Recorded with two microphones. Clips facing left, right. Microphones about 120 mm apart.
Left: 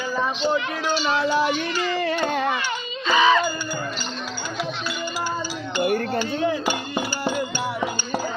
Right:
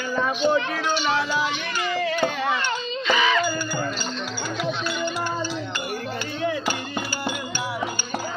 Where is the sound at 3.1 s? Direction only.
30° left (ahead or behind).